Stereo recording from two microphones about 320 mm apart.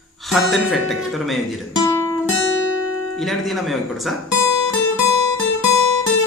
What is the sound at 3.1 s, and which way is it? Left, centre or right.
Speech, centre.